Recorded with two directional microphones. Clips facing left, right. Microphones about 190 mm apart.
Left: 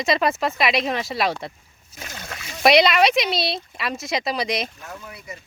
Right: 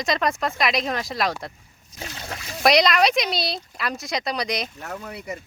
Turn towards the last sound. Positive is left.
turn(degrees=-70)  # may be behind; listen again after turning